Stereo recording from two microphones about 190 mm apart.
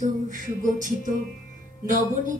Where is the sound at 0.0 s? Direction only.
40° right (ahead or behind).